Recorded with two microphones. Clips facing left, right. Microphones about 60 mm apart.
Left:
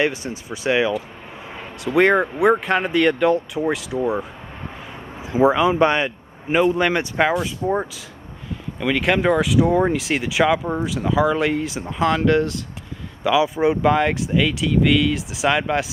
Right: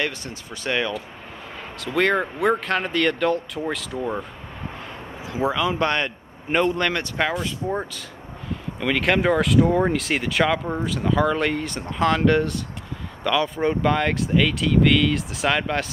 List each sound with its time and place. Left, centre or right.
0.0 s speech: centre
5.2 s speech: left; by 15.9 s centre